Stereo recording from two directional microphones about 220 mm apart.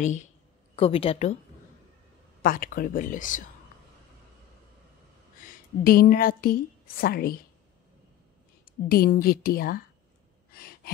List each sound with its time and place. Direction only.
0.0 s speech: 30° left (ahead or behind)
2.4 s speech: 40° left (ahead or behind)
5.4 s a woman's voice: 40° left (ahead or behind)
8.8 s a woman's voice: 40° left (ahead or behind)
10.5 s a sound: 45° left (ahead or behind)